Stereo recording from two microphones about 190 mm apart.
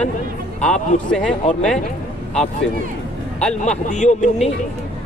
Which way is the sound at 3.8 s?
40° left (ahead or behind).